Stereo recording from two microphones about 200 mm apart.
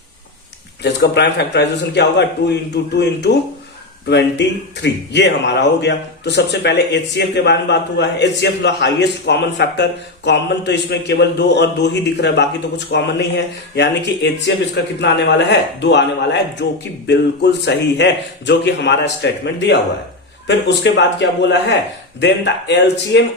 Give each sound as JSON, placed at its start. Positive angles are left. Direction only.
{"t": 0.8, "sound": "speech", "side_deg": 60}